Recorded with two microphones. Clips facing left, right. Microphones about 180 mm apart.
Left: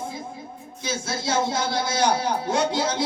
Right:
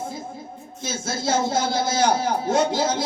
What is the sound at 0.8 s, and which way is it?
A man's voice, 50° right (ahead or behind).